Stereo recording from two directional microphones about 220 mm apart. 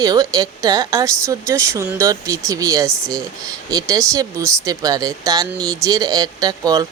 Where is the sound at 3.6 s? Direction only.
15° right (ahead or behind).